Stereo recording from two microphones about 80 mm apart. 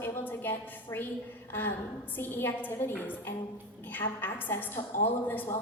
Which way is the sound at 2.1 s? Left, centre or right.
Left.